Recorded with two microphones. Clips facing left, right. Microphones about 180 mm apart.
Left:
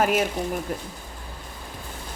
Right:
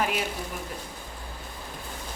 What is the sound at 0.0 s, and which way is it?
Speech, 45° left (ahead or behind).